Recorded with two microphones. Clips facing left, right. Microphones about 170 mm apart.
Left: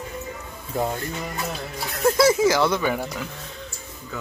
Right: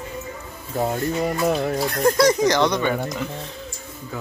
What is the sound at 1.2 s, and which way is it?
Music, 55° right (ahead or behind).